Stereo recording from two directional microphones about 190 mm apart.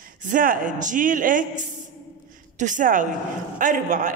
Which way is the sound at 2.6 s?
40° right (ahead or behind).